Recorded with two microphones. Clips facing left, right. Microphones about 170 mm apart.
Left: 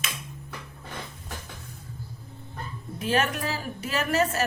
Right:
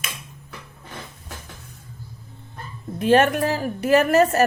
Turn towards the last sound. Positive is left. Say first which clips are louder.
# right 9 dB
turn(degrees=-55)  # may be behind; listen again after turning